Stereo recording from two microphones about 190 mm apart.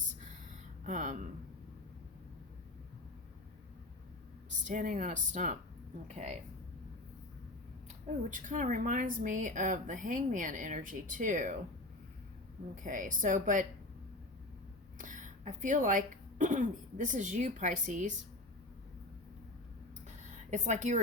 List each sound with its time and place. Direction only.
0.9 s speech: 40° right (ahead or behind)
4.6 s speech: 40° right (ahead or behind)
8.3 s a woman's voice: 45° right (ahead or behind)
12.7 s a woman's voice: 45° right (ahead or behind)
14.9 s speech: 40° right (ahead or behind)
20.5 s speech: 40° right (ahead or behind)